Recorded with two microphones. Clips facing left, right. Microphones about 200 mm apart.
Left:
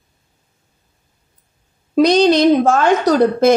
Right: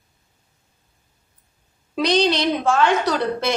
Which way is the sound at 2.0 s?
45° left (ahead or behind).